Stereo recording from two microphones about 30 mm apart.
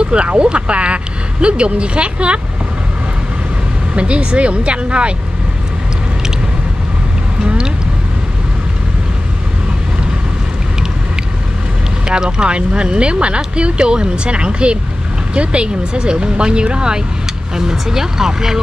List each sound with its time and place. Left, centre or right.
0.0 s speech: right
3.9 s speech: right
7.4 s a sound: right
12.1 s speech: right
17.6 s speech: centre